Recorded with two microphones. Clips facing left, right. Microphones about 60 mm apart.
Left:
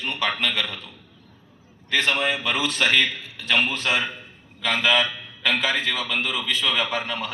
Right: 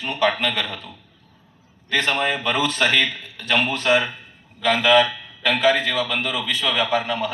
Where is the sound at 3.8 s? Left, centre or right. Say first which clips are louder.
Right 5 dB; centre.